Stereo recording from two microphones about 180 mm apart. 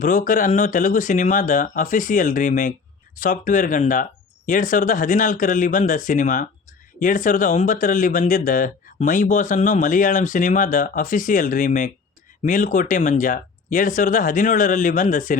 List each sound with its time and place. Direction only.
0.0 s speech: 45° left (ahead or behind)